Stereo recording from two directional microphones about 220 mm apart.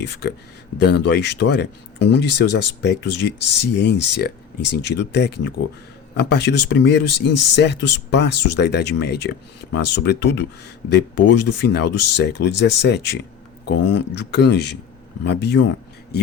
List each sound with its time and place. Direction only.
0.0 s speech: 50° left (ahead or behind)